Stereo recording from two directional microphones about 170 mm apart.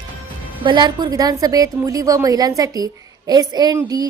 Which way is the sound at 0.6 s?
25° right (ahead or behind).